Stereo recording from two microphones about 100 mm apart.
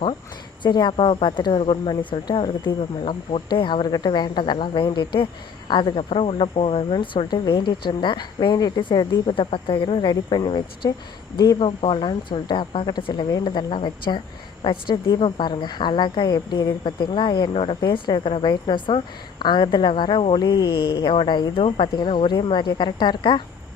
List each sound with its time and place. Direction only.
0.6 s speech: 50° left (ahead or behind)
9.3 s speech: 60° left (ahead or behind)
11.8 s speech: 55° left (ahead or behind)
17.5 s speech: 70° left (ahead or behind)
17.7 s speech: 55° left (ahead or behind)
20.3 s speech: 45° left (ahead or behind)